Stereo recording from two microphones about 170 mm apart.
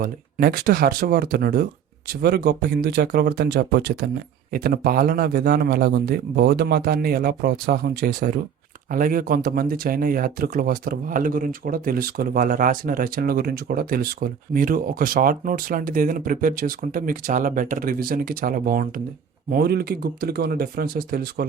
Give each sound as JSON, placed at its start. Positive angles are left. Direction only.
{"t": 0.0, "sound": "speech", "side_deg": -60}